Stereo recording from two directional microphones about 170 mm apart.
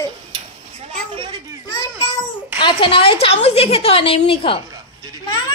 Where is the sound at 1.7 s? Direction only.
25° left (ahead or behind).